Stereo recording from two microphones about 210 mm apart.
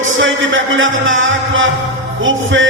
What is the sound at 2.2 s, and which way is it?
Music, 65° right (ahead or behind).